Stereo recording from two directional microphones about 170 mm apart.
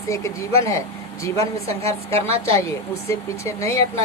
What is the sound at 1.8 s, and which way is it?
Speech, 15° left (ahead or behind).